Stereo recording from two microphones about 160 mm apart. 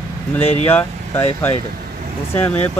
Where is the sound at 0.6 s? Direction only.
15° left (ahead or behind).